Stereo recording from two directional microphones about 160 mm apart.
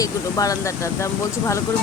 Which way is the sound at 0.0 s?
20° left (ahead or behind).